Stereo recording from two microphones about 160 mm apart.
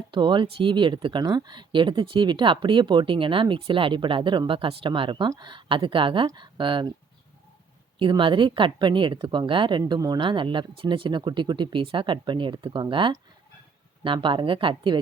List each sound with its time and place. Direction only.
0.1 s speech: 30° right (ahead or behind)
7.9 s speech: 30° right (ahead or behind)